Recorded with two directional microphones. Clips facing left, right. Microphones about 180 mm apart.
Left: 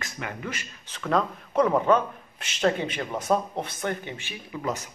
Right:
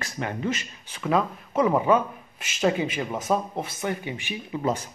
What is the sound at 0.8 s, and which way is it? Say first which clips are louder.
Speech: right 1 dB; 10° right (ahead or behind).